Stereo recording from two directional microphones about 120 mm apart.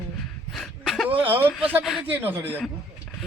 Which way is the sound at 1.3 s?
15° right (ahead or behind).